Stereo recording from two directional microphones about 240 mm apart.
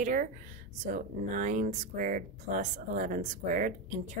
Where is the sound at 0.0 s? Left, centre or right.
Right.